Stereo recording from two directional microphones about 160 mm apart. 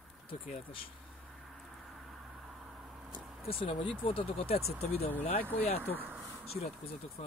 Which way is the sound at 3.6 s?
35° left (ahead or behind).